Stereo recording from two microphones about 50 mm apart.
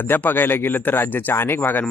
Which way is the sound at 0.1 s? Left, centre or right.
Left.